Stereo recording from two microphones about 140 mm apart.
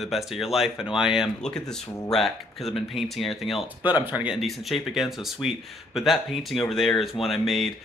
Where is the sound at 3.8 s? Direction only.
15° right (ahead or behind).